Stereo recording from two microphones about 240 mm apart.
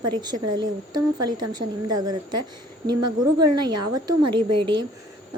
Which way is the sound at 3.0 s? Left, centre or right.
Right.